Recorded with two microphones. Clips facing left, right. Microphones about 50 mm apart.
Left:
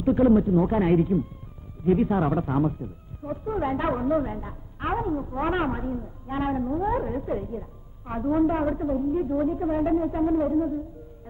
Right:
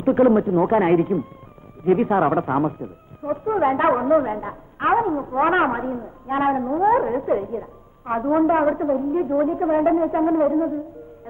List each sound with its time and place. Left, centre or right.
0.3 s a woman's voice: right